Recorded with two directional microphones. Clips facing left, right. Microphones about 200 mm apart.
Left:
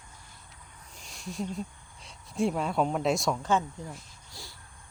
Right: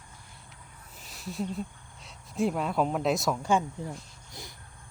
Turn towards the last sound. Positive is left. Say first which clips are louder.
# right 3 dB
turn(degrees=-20)  # may be behind; listen again after turning